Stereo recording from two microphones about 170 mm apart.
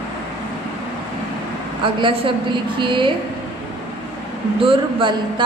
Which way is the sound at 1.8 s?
30° right (ahead or behind).